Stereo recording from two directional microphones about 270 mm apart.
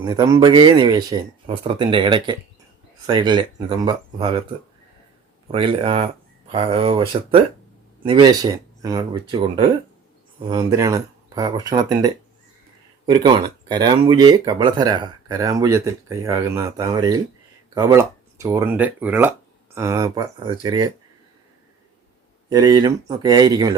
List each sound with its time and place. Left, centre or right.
0.0 s speech: centre
5.5 s speech: centre
10.4 s speech: centre
22.4 s speech: centre